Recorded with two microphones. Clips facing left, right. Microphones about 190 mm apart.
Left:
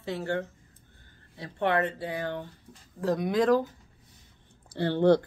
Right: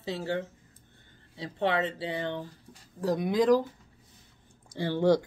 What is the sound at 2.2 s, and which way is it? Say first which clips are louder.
Speech: even; 25° right (ahead or behind).